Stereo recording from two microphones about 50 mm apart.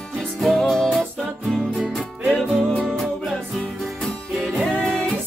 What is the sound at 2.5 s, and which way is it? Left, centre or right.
Music, centre.